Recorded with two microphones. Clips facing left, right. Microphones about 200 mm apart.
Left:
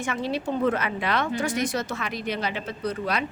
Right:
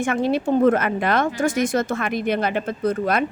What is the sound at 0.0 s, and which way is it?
A woman's voice, 50° right (ahead or behind).